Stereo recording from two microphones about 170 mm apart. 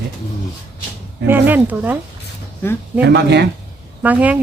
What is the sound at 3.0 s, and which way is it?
Speech, 90° right.